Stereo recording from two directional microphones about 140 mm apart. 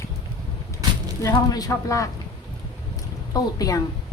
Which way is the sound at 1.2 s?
25° left (ahead or behind).